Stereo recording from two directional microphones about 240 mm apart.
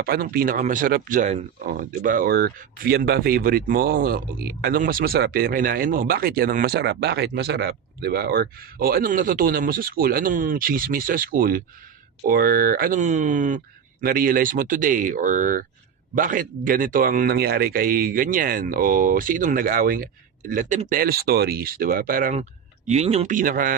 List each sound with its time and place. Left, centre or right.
0.0 s speech: right